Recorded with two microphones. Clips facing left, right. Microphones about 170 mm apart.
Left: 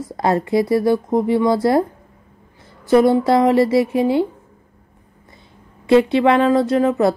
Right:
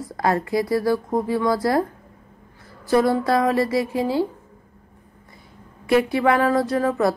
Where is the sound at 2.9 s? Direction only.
20° left (ahead or behind).